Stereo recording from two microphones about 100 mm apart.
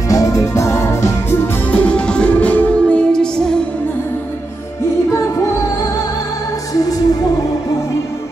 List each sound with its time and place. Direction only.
0.1 s music: 35° left (ahead or behind)
1.7 s music: 15° left (ahead or behind)